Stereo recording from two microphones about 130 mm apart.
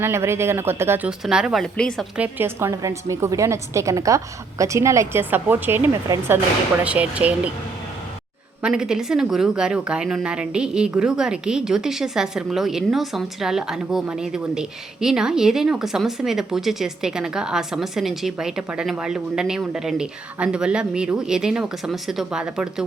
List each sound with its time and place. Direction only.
0.0 s a woman's voice: 20° right (ahead or behind)
1.2 s speech: 5° right (ahead or behind)
1.6 s speech: 5° left (ahead or behind)
2.1 s a woman's voice: 15° right (ahead or behind)
8.6 s speech: 5° right (ahead or behind)